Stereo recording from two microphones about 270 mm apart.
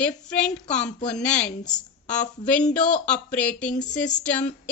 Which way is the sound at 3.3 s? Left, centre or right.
Centre.